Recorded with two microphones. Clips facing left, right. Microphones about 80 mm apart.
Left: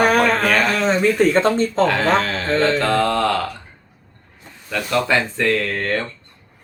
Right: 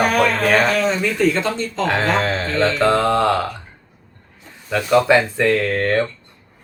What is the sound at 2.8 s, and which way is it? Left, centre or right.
Speech, centre.